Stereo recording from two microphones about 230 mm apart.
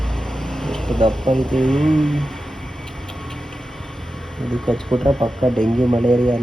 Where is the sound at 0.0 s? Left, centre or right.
Centre.